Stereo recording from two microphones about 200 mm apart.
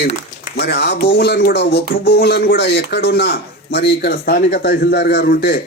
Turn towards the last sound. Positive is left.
turn(degrees=55)  # may be behind; listen again after turning